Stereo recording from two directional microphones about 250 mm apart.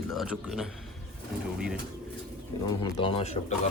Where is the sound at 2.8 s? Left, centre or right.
Centre.